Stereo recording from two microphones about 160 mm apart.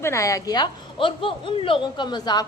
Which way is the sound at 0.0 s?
20° left (ahead or behind).